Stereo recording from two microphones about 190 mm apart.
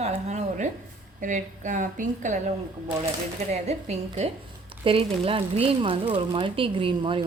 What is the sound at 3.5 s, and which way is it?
A woman's voice, 35° right (ahead or behind).